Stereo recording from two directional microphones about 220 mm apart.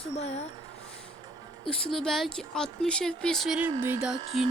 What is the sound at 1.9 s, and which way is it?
Speech, centre (ahead or behind).